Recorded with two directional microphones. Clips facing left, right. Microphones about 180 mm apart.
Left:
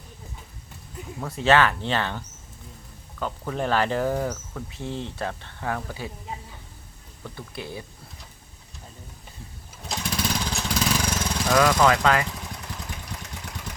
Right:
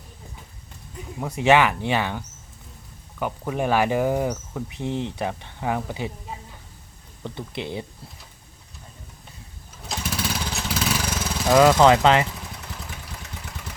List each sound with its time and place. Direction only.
1.2 s speech: 15° right (ahead or behind)
7.3 s speech: 20° right (ahead or behind)
9.9 s vehicle: 5° right (ahead or behind)
11.5 s speech: 25° right (ahead or behind)
12.3 s vehicle: centre (ahead or behind)